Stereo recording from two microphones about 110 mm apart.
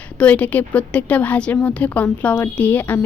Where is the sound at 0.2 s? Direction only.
10° left (ahead or behind).